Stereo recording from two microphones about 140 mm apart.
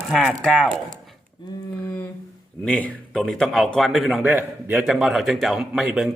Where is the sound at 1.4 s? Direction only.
35° left (ahead or behind).